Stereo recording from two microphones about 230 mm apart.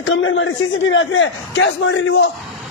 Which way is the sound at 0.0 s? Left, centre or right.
Left.